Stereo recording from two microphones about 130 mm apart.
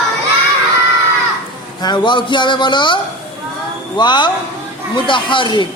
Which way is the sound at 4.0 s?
35° left (ahead or behind).